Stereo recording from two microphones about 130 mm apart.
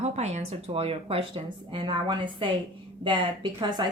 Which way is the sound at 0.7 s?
50° right (ahead or behind).